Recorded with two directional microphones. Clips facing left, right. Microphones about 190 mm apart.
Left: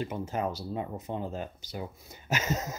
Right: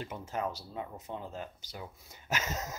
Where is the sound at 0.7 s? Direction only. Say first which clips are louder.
Left 6 dB; 35° left (ahead or behind).